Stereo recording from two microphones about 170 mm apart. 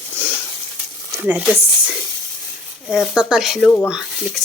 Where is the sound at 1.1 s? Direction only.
10° right (ahead or behind).